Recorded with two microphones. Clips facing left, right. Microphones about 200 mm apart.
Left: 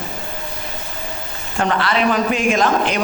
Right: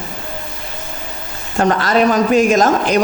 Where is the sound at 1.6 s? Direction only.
40° right (ahead or behind).